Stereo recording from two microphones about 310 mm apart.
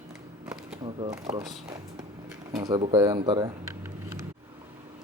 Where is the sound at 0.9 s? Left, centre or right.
Centre.